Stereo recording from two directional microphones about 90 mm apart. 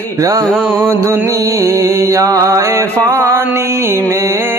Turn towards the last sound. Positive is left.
turn(degrees=-35)  # may be behind; listen again after turning